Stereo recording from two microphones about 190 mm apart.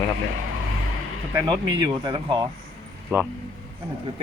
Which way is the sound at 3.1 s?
10° right (ahead or behind).